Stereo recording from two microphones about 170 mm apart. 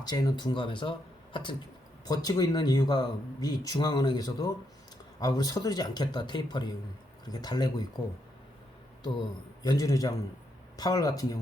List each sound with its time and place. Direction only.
0.0 s speech: 25° left (ahead or behind)
9.0 s speech: 25° left (ahead or behind)